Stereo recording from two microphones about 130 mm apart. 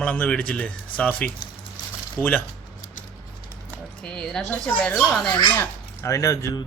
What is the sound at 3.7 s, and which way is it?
Speech, 5° left (ahead or behind).